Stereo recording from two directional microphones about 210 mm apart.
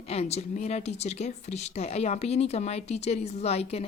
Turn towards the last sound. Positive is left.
turn(degrees=30)  # may be behind; listen again after turning